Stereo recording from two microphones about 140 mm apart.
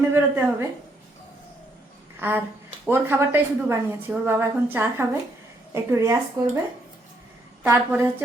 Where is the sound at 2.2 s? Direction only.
15° right (ahead or behind).